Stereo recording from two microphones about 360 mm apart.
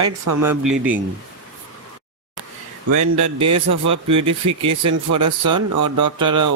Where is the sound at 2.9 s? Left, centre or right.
Right.